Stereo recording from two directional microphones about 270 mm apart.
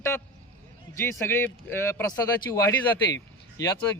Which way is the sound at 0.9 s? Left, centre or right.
Centre.